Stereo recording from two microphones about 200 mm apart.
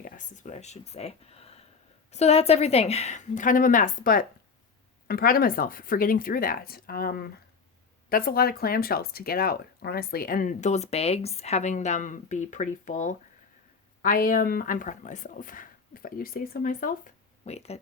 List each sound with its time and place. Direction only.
0.0 s speech: 40° left (ahead or behind)